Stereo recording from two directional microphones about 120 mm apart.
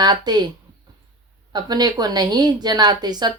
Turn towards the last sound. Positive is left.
turn(degrees=-35)  # may be behind; listen again after turning